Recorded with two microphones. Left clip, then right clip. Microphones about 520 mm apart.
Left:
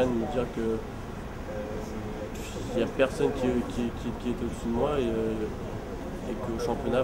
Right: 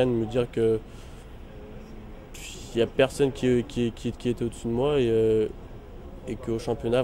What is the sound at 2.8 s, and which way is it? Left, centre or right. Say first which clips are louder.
Speech: right 3 dB; right.